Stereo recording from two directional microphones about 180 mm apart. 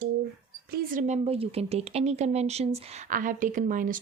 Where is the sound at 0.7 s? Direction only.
55° right (ahead or behind).